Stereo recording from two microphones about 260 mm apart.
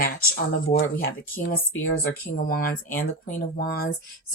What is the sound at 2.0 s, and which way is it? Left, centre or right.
Speech, left.